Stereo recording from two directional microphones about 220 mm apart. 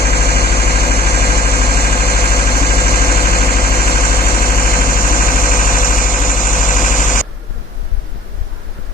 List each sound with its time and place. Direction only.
0.0 s engine: 45° left (ahead or behind)